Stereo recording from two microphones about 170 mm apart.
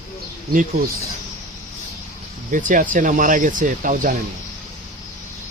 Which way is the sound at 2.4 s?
50° right (ahead or behind).